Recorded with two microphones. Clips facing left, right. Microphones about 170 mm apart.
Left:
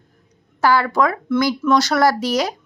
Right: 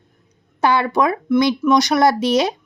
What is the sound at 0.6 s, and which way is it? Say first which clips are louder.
A woman's voice: even; 20° right (ahead or behind).